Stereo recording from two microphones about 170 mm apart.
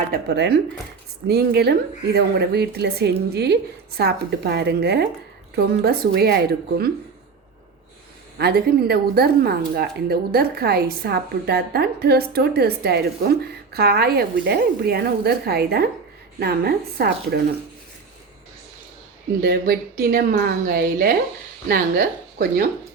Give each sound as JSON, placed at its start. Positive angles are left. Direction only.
{"t": 0.0, "sound": "speech", "side_deg": -65}
{"t": 8.4, "sound": "speech", "side_deg": -65}
{"t": 19.4, "sound": "a woman's voice", "side_deg": -60}